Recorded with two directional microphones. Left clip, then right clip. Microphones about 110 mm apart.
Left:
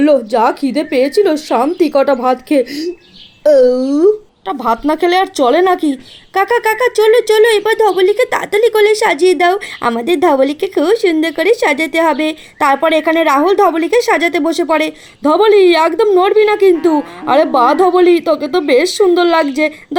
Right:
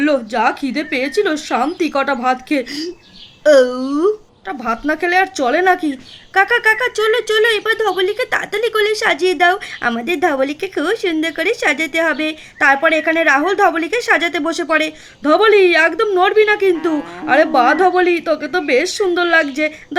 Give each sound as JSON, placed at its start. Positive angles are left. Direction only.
{"t": 0.0, "sound": "a woman's voice", "side_deg": 20}
{"t": 4.4, "sound": "speech", "side_deg": 30}